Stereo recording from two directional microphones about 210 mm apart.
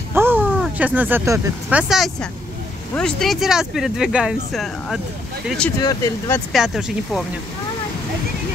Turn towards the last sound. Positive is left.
turn(degrees=0)  # may be behind; listen again after turning